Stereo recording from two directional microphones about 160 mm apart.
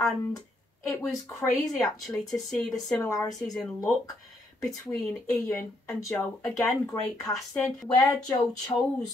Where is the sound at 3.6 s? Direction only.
25° left (ahead or behind).